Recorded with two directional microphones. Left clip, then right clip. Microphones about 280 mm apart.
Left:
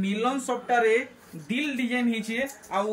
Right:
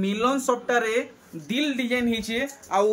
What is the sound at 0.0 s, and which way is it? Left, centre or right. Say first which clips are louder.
Speech: right 4 dB; centre.